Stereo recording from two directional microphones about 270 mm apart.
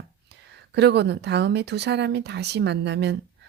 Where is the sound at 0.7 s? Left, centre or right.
Right.